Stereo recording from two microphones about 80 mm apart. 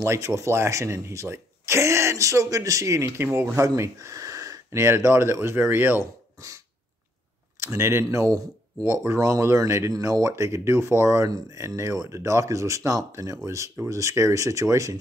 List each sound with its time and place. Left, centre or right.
0.0 s speech: right
6.4 s throat clearing: right
7.6 s speech: right